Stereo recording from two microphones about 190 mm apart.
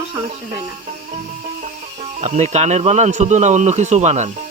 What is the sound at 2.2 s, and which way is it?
Speech, 35° right (ahead or behind).